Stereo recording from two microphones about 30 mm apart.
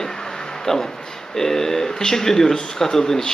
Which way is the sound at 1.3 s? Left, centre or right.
Centre.